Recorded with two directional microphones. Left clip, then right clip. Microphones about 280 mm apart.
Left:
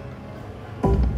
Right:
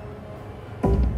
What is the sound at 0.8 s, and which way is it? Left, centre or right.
Music, centre.